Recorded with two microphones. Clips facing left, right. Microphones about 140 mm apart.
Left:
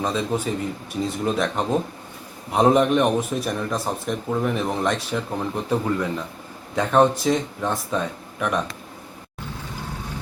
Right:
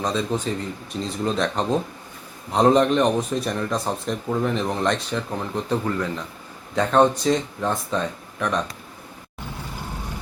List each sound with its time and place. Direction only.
0.0 s speech: 5° left (ahead or behind)